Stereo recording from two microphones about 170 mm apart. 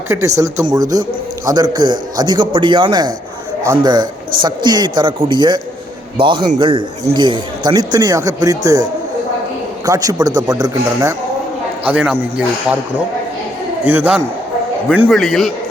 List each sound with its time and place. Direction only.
0.1 s a man's voice: 20° right (ahead or behind)
11.9 s a man's voice: 5° right (ahead or behind)
13.8 s a man's voice: 10° right (ahead or behind)